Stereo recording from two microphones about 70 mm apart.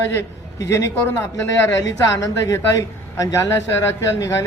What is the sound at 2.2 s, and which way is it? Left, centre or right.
A man's voice, left.